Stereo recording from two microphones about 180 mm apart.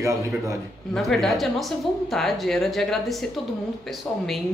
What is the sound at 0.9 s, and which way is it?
Speech, centre (ahead or behind).